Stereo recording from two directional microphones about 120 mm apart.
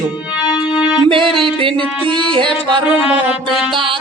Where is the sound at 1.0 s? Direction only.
45° right (ahead or behind).